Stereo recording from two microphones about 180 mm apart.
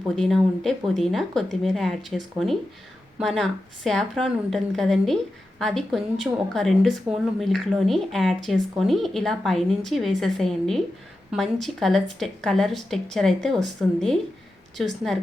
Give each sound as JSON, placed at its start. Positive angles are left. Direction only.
{"t": 0.2, "sound": "speech", "side_deg": 0}